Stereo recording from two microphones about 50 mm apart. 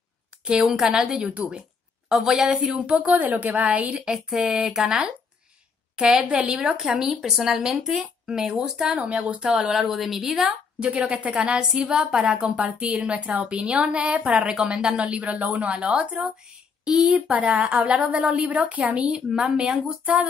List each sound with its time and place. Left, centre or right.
0.4 s speech: centre
1.3 s a woman's voice: right
2.0 s speech: centre
3.0 s a woman's voice: right
4.5 s speech: centre
5.9 s a woman's voice: centre
6.5 s a woman's voice: centre
11.2 s a woman's voice: centre
14.5 s a woman's voice: centre
15.7 s a woman's voice: centre
16.8 s speech: centre
17.4 s a woman's voice: right
18.9 s speech: centre
19.8 s a woman's voice: right